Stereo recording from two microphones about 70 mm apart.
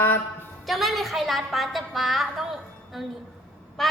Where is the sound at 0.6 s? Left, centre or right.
Centre.